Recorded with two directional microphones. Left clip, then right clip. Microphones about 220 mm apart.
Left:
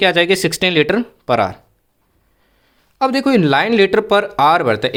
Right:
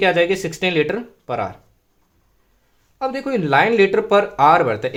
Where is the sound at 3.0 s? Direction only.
40° left (ahead or behind).